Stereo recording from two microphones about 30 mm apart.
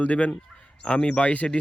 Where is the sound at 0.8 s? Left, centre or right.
Left.